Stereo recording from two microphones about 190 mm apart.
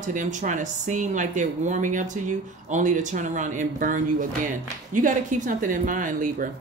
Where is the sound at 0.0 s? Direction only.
40° right (ahead or behind).